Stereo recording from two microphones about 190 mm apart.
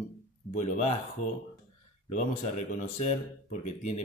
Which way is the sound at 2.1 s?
35° left (ahead or behind).